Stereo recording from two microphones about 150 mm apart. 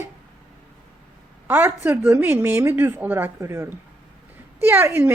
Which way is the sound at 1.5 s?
15° right (ahead or behind).